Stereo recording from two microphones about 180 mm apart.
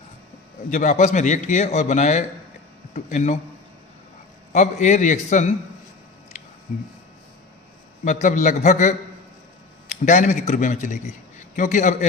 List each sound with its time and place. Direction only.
0.7 s a man's voice: 45° left (ahead or behind)
4.5 s a man's voice: 40° left (ahead or behind)
8.0 s a man's voice: 45° left (ahead or behind)
10.1 s a man's voice: 45° left (ahead or behind)